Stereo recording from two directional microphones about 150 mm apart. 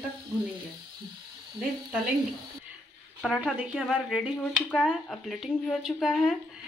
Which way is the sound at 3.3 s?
5° right (ahead or behind).